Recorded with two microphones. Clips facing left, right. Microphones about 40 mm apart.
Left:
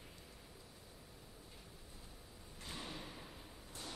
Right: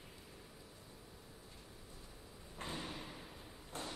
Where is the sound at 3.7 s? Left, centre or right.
Right.